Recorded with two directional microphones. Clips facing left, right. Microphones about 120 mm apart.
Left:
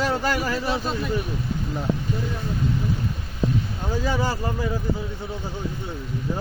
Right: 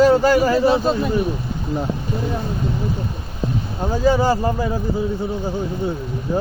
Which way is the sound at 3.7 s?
35° right (ahead or behind).